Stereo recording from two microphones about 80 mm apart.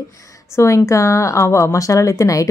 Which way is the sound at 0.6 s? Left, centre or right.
Left.